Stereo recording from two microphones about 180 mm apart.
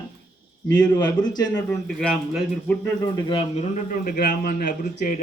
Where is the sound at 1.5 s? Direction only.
5° left (ahead or behind).